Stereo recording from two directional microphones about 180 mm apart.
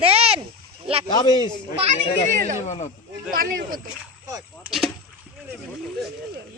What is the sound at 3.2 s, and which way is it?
Speech, 50° right (ahead or behind).